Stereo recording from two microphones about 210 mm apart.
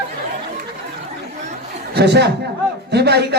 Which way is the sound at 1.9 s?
50° right (ahead or behind).